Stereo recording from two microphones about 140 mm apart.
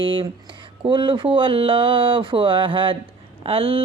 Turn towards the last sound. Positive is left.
turn(degrees=-40)  # may be behind; listen again after turning